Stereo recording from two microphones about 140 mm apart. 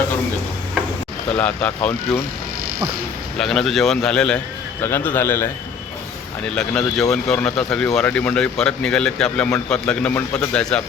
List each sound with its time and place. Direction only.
1.4 s speech: 10° left (ahead or behind)
3.3 s speech: 5° left (ahead or behind)
4.8 s speech: 15° left (ahead or behind)
6.5 s speech: 5° left (ahead or behind)